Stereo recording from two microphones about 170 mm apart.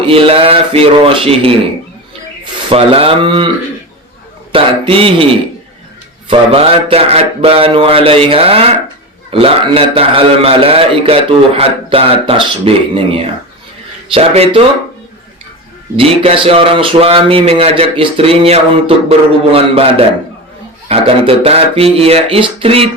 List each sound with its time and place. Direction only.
0.0 s a man's voice: 30° right (ahead or behind)
4.5 s a man's voice: 30° right (ahead or behind)
16.0 s a man's voice: 35° right (ahead or behind)